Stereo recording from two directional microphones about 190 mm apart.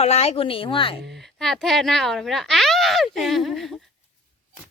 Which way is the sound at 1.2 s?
Centre (ahead or behind).